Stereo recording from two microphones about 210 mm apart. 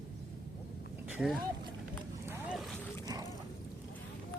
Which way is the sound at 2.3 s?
5° right (ahead or behind).